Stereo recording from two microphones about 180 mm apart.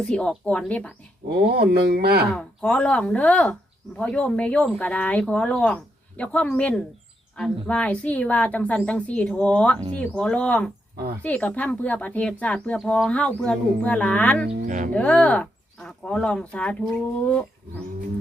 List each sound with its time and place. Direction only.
0.0 s a woman's voice: 5° left (ahead or behind)
1.3 s speech: 60° right (ahead or behind)
2.3 s speech: 5° left (ahead or behind)
17.2 s roaring cats: 5° left (ahead or behind)